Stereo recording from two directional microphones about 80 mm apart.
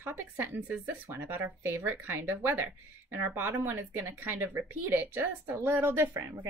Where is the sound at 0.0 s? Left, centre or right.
Right.